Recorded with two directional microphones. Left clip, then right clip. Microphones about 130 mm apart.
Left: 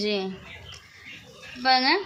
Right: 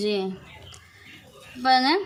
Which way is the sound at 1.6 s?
40° right (ahead or behind).